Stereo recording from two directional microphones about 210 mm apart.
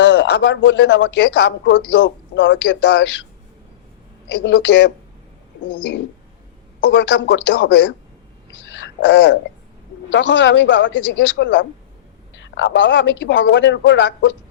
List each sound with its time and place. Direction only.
0.0 s speech: 60° left (ahead or behind)
4.4 s speech: 60° left (ahead or behind)
8.6 s a sound: 60° left (ahead or behind)
10.1 s speech: 60° left (ahead or behind)